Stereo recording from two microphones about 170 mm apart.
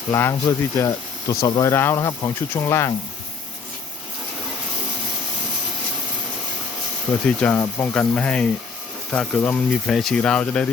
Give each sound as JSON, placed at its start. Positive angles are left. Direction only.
{"t": 0.1, "sound": "speech", "side_deg": 15}
{"t": 7.3, "sound": "speech", "side_deg": 10}